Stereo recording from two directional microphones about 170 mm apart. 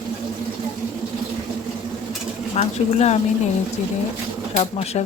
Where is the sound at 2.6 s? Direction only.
40° left (ahead or behind).